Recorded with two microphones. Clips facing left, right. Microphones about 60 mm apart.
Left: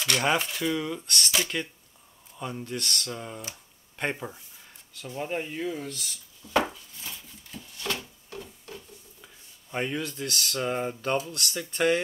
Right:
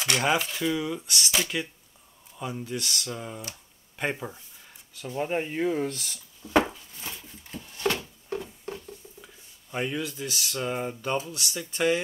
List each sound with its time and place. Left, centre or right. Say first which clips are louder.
0.2 s speech: right 1 dB; centre
5.0 s speech: right 3 dB; centre
5.6 s speech: right 6 dB; right
6.7 s a sound: right 2 dB; right
8.7 s a sound: right 4 dB; centre
11.2 s speech: left 1 dB; centre